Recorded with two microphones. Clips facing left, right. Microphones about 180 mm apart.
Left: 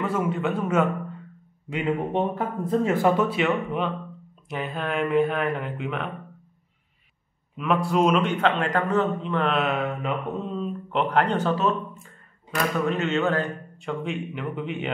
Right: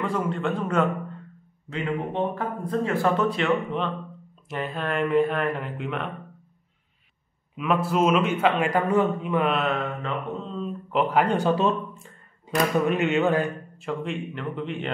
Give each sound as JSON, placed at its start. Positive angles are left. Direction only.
{"t": 0.0, "sound": "speech", "side_deg": 5}
{"t": 2.3, "sound": "speech", "side_deg": 20}
{"t": 3.2, "sound": "speech", "side_deg": 5}
{"t": 7.5, "sound": "a man's voice", "side_deg": 0}
{"t": 9.6, "sound": "speech", "side_deg": 0}